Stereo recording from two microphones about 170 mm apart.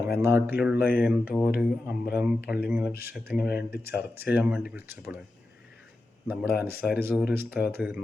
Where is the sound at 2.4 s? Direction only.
65° left (ahead or behind).